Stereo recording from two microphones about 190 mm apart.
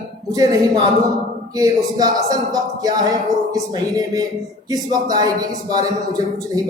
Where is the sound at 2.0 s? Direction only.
20° right (ahead or behind).